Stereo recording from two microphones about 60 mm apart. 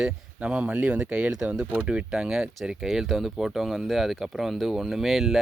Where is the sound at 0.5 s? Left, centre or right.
Centre.